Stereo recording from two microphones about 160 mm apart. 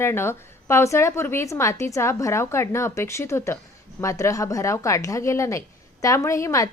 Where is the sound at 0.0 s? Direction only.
15° left (ahead or behind).